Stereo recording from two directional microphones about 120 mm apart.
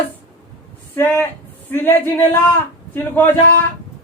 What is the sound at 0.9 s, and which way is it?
A man's voice, 20° left (ahead or behind).